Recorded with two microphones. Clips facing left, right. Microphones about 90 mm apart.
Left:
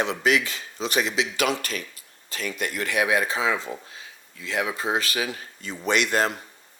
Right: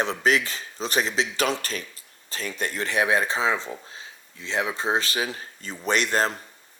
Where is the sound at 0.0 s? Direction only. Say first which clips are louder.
Even; 35° right (ahead or behind).